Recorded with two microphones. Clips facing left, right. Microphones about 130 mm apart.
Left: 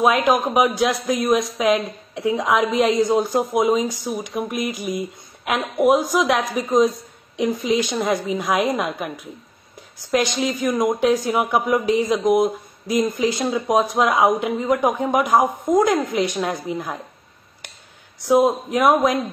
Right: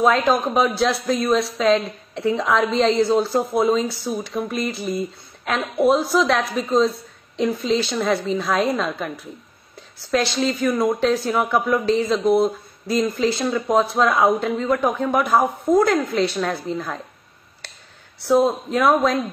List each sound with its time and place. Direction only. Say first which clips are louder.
0.0 s a woman's voice: even; 15° left (ahead or behind)
17.6 s a sound: right 1 dB; 15° left (ahead or behind)
18.2 s a woman's voice: left 1 dB; 15° left (ahead or behind)